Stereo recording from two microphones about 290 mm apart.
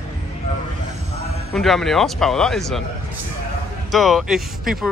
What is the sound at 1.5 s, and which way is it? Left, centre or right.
Speech, centre.